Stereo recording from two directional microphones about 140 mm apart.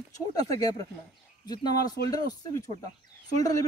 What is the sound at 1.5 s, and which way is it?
A man's voice, 30° left (ahead or behind).